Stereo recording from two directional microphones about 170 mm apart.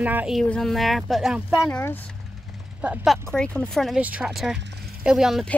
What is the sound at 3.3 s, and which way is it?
Speech, 5° left (ahead or behind).